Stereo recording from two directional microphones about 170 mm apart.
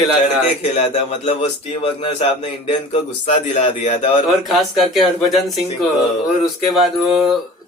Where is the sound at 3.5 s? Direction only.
45° left (ahead or behind).